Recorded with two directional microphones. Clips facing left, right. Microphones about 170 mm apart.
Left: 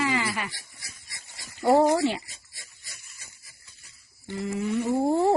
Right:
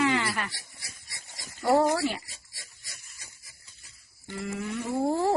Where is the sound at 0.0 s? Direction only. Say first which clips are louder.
Right 1 dB; 5° left (ahead or behind).